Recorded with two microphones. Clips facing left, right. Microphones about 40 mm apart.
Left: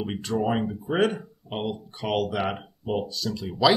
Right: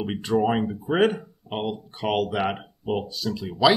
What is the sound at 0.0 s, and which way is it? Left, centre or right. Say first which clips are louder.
Speech: right 4 dB; centre.